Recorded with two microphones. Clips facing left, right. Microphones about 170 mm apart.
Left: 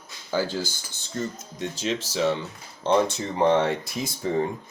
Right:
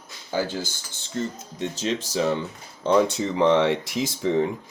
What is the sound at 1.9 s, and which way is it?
Speech, 35° right (ahead or behind).